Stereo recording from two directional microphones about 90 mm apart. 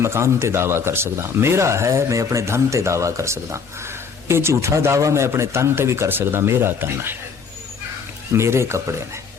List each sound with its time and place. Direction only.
0.0 s speech: 30° right (ahead or behind)
8.3 s speech: 30° right (ahead or behind)